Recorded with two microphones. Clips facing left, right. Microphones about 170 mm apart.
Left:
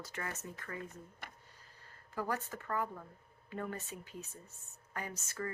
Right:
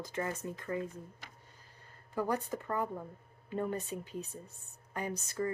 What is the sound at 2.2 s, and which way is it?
A woman's voice, 15° right (ahead or behind).